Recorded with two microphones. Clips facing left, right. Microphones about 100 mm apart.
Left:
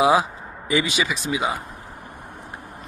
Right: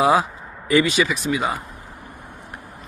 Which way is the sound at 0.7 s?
20° left (ahead or behind).